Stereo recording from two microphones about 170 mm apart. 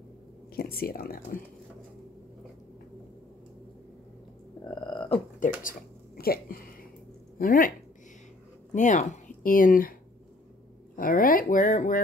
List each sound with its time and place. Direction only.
0.6 s speech: 65° left (ahead or behind)
4.6 s a sound: 5° left (ahead or behind)
5.6 s dishes: 60° left (ahead or behind)
7.3 s speech: 55° left (ahead or behind)
8.7 s a woman's voice: 50° left (ahead or behind)
11.0 s speech: 55° left (ahead or behind)